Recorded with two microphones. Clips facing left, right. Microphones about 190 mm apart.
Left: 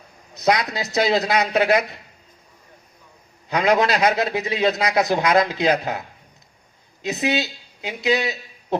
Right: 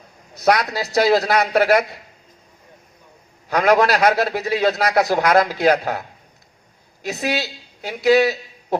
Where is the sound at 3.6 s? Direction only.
20° left (ahead or behind).